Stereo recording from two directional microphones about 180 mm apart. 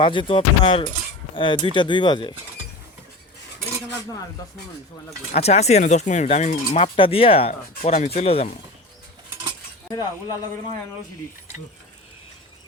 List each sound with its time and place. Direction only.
0.0 s speech: 30° left (ahead or behind)
5.3 s speech: 35° left (ahead or behind)
9.9 s speech: 20° left (ahead or behind)